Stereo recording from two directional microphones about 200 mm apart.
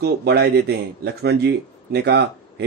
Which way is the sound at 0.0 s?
55° right (ahead or behind).